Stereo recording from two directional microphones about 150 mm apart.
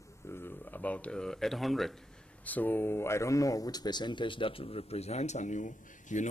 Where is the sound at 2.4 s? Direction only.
10° left (ahead or behind).